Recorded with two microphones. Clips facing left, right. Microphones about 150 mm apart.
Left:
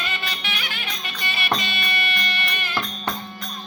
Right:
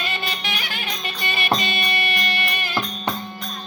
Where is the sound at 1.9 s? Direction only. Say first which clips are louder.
Right 3 dB; 15° right (ahead or behind).